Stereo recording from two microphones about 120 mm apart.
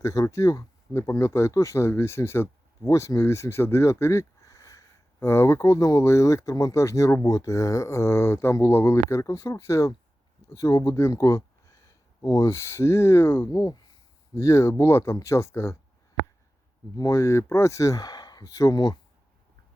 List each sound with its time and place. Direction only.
0.0 s speech: 25° left (ahead or behind)
17.0 s speech: 25° left (ahead or behind)